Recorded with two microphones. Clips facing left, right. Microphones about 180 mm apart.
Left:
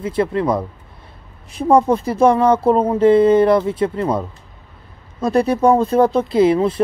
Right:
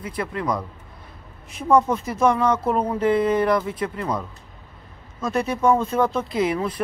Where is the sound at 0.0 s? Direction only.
25° left (ahead or behind).